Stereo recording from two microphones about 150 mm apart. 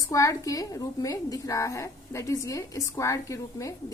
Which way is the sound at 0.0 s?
20° left (ahead or behind).